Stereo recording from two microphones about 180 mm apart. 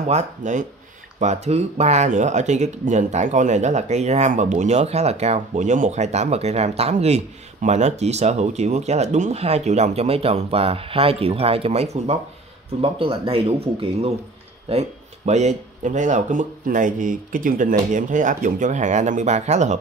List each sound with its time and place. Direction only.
0.0 s speech: 40° right (ahead or behind)